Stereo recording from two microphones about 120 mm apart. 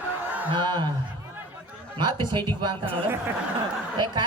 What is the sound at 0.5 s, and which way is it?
Speech, 40° right (ahead or behind).